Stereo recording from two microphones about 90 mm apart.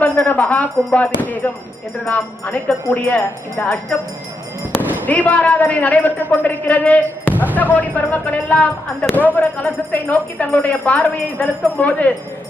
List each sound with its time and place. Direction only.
0.3 s speech: 15° left (ahead or behind)
4.8 s a sound: 20° right (ahead or behind)
5.0 s speech: 15° left (ahead or behind)